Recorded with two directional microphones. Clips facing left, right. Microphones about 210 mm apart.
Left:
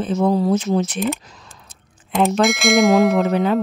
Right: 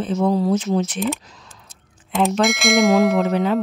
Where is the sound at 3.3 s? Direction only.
50° left (ahead or behind).